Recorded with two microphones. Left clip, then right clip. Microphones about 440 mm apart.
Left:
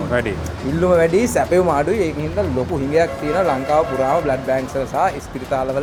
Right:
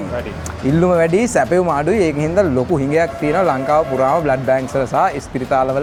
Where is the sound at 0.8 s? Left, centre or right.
Right.